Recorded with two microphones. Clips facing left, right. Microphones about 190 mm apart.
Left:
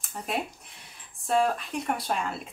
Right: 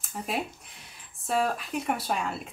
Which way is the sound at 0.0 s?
Centre (ahead or behind).